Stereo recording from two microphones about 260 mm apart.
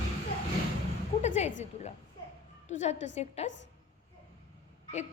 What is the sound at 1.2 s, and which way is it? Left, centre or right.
A woman's voice, left.